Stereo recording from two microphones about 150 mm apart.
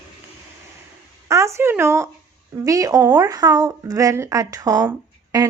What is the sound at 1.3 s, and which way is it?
Speech, 20° right (ahead or behind).